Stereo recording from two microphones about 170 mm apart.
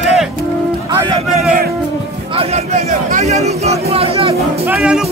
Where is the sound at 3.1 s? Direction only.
45° right (ahead or behind).